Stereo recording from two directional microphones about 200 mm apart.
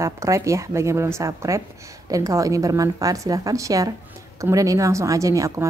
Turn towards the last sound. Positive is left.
turn(degrees=-15)  # may be behind; listen again after turning